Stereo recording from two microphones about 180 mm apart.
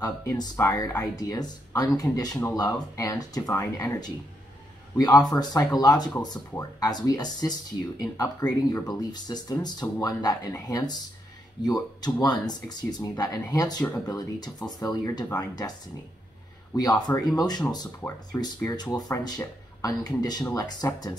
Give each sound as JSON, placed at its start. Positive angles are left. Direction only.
{"t": 0.0, "sound": "speech", "side_deg": 20}
{"t": 5.1, "sound": "speech", "side_deg": 20}
{"t": 16.7, "sound": "speech", "side_deg": 20}